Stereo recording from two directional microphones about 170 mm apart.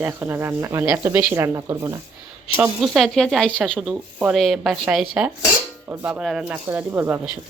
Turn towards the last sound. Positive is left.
turn(degrees=-15)  # may be behind; listen again after turning